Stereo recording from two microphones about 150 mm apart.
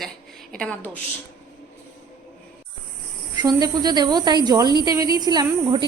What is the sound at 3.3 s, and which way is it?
Speech, 25° right (ahead or behind).